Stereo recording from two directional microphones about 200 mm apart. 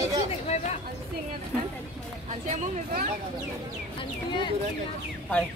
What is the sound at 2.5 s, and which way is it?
Speech, 45° right (ahead or behind).